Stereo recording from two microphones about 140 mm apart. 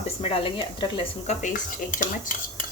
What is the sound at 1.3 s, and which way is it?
Speech, 60° left (ahead or behind).